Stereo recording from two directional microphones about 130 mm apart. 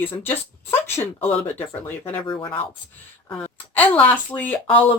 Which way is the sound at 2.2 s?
40° left (ahead or behind).